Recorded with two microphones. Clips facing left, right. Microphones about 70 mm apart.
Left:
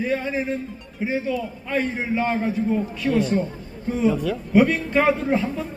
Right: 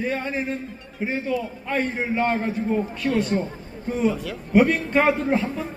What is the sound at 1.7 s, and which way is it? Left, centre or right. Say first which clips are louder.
Speech: left 1 dB; centre.